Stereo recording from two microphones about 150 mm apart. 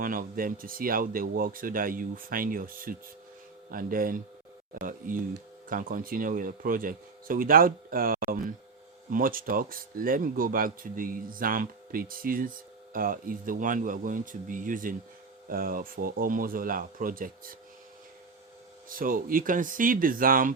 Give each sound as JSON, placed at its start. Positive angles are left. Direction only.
{"t": 0.0, "sound": "speech", "side_deg": -70}
{"t": 18.9, "sound": "speech", "side_deg": -65}